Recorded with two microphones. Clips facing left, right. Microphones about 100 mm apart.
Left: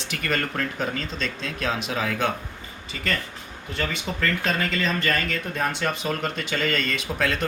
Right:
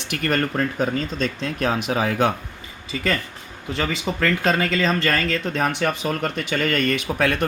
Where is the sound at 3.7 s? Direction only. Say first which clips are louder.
Right 4 dB; 90° right; by 6.1 s 55° right (ahead or behind).